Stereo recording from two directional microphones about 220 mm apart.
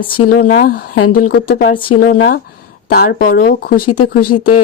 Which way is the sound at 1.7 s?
25° left (ahead or behind).